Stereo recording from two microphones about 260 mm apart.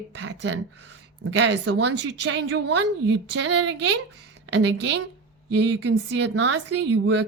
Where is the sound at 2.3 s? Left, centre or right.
Right.